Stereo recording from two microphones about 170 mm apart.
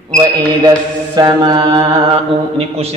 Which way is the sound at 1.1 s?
25° right (ahead or behind).